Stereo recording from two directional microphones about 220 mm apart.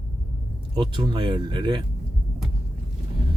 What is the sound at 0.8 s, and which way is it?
Speech, 20° right (ahead or behind).